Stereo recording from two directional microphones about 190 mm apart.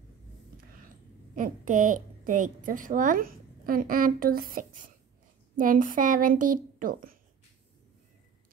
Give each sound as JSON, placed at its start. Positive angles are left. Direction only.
{"t": 1.3, "sound": "a woman's voice", "side_deg": -45}